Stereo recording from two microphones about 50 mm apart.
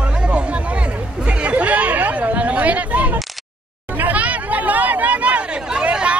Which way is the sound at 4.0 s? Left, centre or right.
Right.